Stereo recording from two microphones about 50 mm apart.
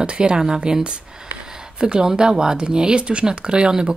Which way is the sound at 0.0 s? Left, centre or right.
Centre.